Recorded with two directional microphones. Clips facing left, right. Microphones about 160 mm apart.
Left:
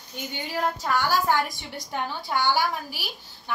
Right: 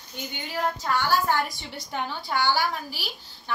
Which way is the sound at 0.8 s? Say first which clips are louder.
Even; 15° left (ahead or behind).